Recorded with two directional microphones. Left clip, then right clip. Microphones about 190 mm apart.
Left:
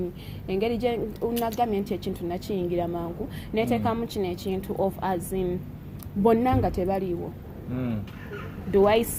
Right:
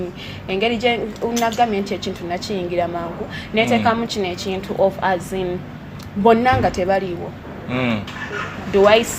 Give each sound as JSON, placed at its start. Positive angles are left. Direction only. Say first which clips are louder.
{"t": 0.4, "sound": "a woman's voice", "louder": "right 8 dB", "side_deg": 45}
{"t": 7.7, "sound": "speech", "louder": "right 12 dB", "side_deg": -15}
{"t": 8.7, "sound": "a woman's voice", "louder": "right 7 dB", "side_deg": 45}